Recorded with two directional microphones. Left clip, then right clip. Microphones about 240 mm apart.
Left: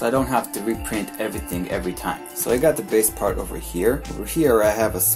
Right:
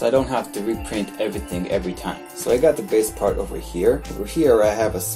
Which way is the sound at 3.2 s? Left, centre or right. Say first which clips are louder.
Right 2 dB; left.